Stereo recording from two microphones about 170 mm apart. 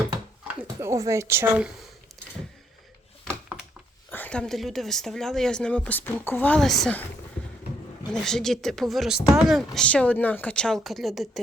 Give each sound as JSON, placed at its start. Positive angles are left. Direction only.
{"t": 0.8, "sound": "a woman's voice", "side_deg": -15}
{"t": 4.1, "sound": "speech", "side_deg": 10}
{"t": 8.1, "sound": "speech", "side_deg": 5}